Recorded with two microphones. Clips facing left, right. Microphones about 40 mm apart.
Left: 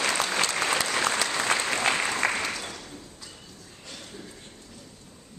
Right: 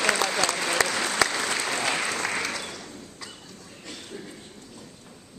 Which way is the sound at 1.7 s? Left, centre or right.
Left.